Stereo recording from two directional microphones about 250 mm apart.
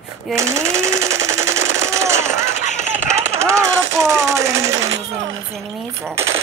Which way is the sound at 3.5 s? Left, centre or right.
Centre.